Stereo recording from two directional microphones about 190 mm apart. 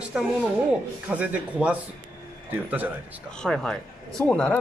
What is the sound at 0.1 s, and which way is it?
Speech, 5° right (ahead or behind).